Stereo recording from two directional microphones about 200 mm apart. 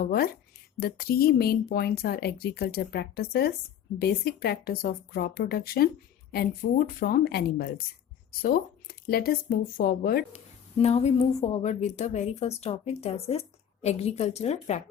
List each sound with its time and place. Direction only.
0.0 s speech: 50° left (ahead or behind)
10.3 s a woman's voice: 35° left (ahead or behind)